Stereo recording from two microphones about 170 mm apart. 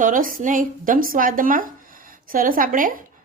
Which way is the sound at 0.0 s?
55° right (ahead or behind).